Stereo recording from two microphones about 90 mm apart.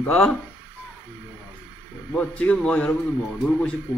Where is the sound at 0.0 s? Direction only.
10° left (ahead or behind).